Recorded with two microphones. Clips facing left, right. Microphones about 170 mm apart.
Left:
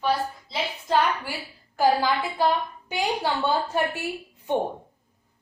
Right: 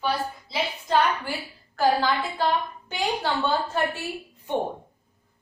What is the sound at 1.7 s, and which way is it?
A woman's voice, 10° left (ahead or behind).